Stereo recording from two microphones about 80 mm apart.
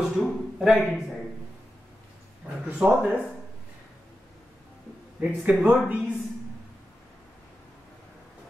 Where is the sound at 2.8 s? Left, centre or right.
Centre.